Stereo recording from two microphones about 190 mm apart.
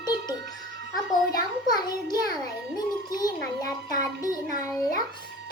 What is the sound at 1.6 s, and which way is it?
A child's voice, 20° left (ahead or behind).